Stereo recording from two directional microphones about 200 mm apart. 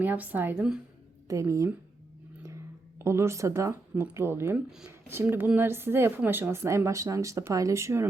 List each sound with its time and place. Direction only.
0.0 s speech: 10° right (ahead or behind)
3.0 s speech: 15° right (ahead or behind)